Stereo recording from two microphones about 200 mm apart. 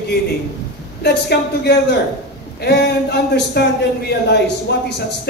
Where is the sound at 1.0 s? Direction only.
55° left (ahead or behind).